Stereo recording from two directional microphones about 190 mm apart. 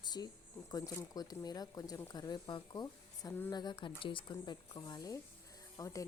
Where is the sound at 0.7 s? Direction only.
15° left (ahead or behind).